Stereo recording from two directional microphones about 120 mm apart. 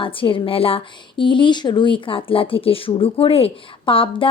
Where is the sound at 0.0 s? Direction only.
45° left (ahead or behind).